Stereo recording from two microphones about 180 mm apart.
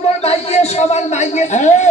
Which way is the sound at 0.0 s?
35° left (ahead or behind).